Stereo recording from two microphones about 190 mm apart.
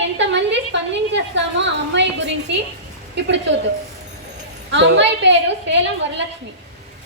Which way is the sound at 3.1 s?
70° right (ahead or behind).